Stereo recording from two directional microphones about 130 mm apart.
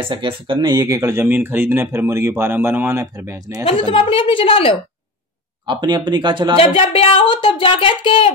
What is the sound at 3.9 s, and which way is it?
Speech, 45° left (ahead or behind).